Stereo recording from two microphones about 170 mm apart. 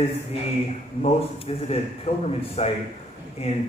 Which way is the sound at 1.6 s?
35° left (ahead or behind).